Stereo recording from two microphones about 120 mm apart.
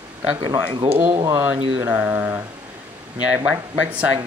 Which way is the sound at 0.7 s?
45° right (ahead or behind).